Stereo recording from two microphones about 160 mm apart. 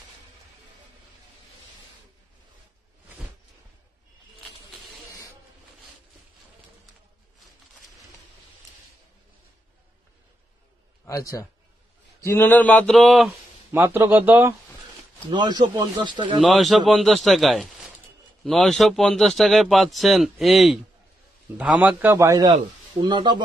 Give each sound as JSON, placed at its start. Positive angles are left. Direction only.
{"t": 11.1, "sound": "a man's voice", "side_deg": 20}
{"t": 13.7, "sound": "speech", "side_deg": -15}
{"t": 15.3, "sound": "a man's voice", "side_deg": -25}
{"t": 16.3, "sound": "a man's voice", "side_deg": 0}